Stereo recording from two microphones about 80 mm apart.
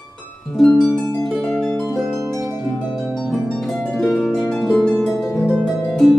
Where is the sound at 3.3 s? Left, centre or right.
Centre.